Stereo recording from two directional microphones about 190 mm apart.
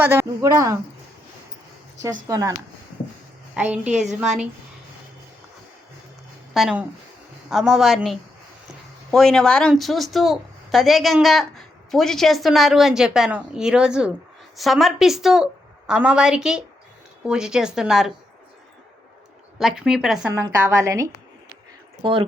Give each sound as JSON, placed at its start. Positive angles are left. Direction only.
{"t": 0.0, "sound": "speech", "side_deg": -15}
{"t": 2.0, "sound": "speech", "side_deg": -20}
{"t": 3.5, "sound": "a woman's voice", "side_deg": -5}
{"t": 6.5, "sound": "speech", "side_deg": 0}
{"t": 19.5, "sound": "speech", "side_deg": -5}